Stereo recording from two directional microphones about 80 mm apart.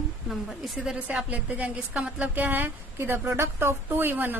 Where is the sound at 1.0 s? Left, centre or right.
Centre.